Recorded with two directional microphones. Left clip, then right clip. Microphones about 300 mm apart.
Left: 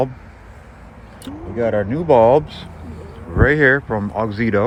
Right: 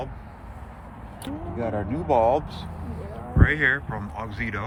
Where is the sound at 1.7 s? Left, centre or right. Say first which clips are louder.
Left 9 dB; left.